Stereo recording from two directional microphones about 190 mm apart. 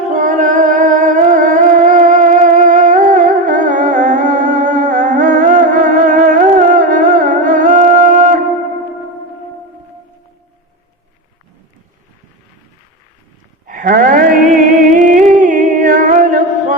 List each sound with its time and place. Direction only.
0.1 s music: 45° right (ahead or behind)
13.7 s a sound: 45° right (ahead or behind)
14.9 s music: 40° right (ahead or behind)